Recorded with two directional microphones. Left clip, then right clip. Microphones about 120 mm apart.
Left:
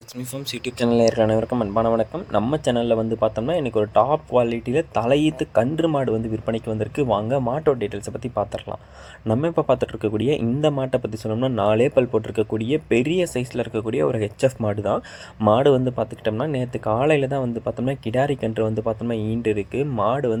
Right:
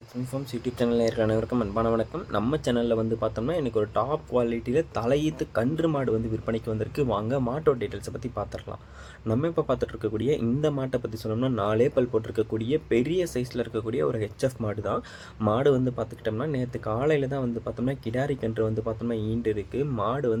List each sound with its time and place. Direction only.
0.4 s speech: 80° left; by 1.1 s 60° left (ahead or behind)
1.1 s speech: 25° left (ahead or behind)